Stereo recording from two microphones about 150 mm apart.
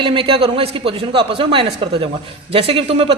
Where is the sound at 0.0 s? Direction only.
35° right (ahead or behind).